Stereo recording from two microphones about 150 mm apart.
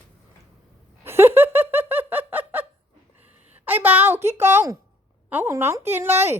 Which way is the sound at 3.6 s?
10° right (ahead or behind).